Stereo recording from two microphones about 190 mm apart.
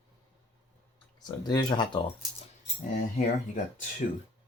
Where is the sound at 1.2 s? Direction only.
20° left (ahead or behind).